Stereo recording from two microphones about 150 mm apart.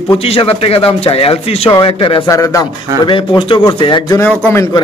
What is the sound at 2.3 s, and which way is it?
Speech, 20° left (ahead or behind).